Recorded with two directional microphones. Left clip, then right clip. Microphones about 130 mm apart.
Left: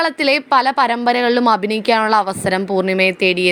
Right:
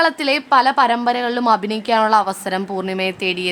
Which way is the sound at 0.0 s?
25° left (ahead or behind).